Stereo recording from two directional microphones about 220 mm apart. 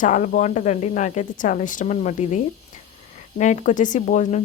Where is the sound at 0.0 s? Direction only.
35° left (ahead or behind).